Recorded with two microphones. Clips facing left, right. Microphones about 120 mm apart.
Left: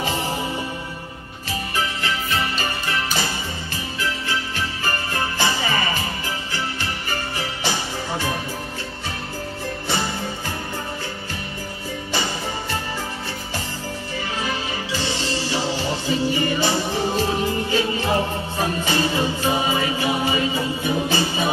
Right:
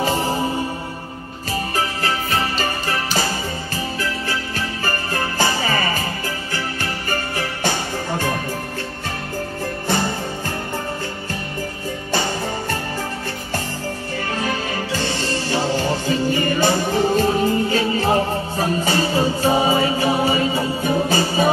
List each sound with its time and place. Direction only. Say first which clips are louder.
0.0 s music: right 5 dB; 40° right (ahead or behind)
1.5 s music: right 3 dB; 40° right (ahead or behind)
14.3 s music: right 4 dB; 50° right (ahead or behind)